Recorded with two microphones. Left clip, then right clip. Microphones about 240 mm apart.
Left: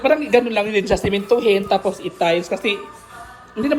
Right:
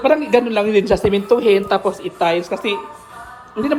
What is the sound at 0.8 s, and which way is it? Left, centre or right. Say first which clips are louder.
Speech: right 3 dB; right.